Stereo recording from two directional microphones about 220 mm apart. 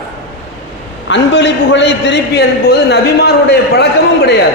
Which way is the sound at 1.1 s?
55° left (ahead or behind).